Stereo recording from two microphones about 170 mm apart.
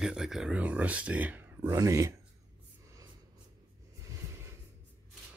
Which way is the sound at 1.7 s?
20° right (ahead or behind).